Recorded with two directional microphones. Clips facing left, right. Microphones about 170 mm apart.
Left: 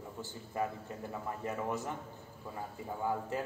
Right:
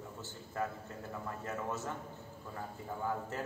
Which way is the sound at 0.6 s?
15° left (ahead or behind).